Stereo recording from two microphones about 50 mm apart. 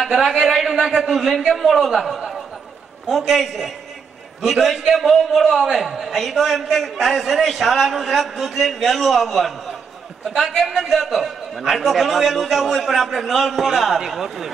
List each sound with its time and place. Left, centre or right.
0.0 s a man's voice: centre